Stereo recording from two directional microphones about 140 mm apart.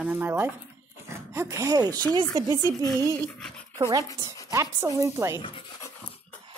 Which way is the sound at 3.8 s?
25° right (ahead or behind).